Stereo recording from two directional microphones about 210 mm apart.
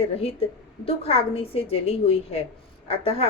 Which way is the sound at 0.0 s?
30° left (ahead or behind).